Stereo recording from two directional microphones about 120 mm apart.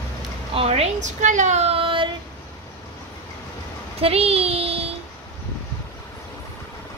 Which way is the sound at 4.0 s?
55° right (ahead or behind).